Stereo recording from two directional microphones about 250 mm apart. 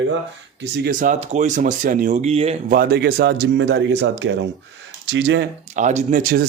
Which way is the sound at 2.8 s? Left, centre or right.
Right.